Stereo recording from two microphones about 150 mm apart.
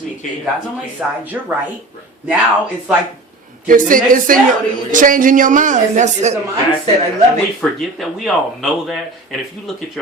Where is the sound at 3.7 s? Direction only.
65° right (ahead or behind).